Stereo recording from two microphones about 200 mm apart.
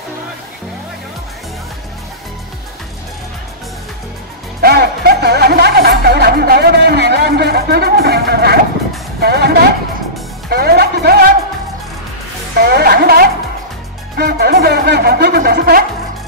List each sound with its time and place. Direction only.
4.6 s music: 55° right (ahead or behind)
9.2 s a sound: 55° right (ahead or behind)
10.5 s music: 50° right (ahead or behind)
12.5 s music: 55° right (ahead or behind)